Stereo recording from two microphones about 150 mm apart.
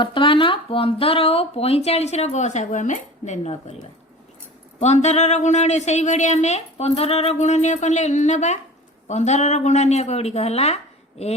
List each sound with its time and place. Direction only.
0.0 s speech: 35° left (ahead or behind)
4.8 s a woman's voice: 50° left (ahead or behind)